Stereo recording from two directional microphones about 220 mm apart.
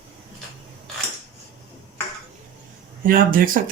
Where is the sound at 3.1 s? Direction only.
40° right (ahead or behind).